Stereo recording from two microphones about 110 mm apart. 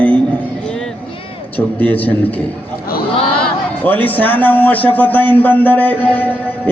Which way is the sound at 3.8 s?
15° left (ahead or behind).